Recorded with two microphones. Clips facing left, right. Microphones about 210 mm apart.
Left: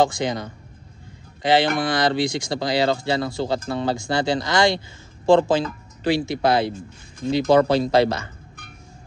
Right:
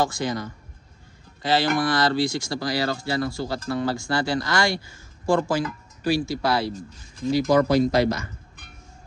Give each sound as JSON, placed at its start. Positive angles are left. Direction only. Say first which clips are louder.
{"t": 0.0, "sound": "speech", "louder": "left 4 dB", "side_deg": 20}